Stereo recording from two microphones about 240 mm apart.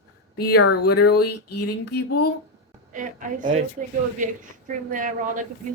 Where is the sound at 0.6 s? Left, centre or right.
Left.